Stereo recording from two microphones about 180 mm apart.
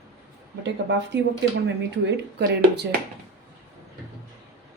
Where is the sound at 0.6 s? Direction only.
75° right (ahead or behind).